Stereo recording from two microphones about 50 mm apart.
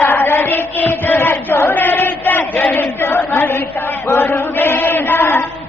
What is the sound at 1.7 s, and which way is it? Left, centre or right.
A man's voice, left.